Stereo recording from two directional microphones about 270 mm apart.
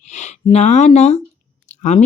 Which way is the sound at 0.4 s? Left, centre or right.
Left.